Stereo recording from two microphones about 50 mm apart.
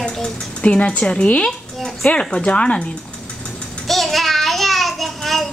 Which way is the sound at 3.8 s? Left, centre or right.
Centre.